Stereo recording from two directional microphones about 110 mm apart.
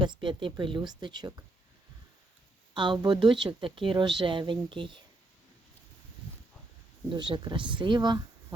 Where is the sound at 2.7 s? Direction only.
45° right (ahead or behind).